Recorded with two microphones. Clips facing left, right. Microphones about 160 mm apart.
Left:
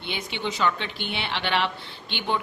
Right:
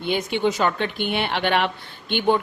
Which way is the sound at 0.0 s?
45° right (ahead or behind).